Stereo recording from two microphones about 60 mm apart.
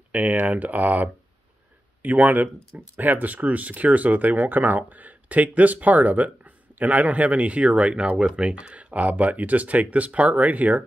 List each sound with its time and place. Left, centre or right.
0.1 s speech: right